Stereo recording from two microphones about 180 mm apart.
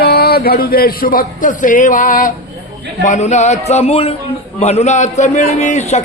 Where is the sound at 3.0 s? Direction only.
40° left (ahead or behind).